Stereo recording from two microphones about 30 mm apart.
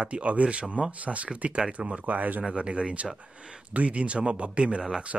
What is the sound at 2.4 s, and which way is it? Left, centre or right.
Speech, right.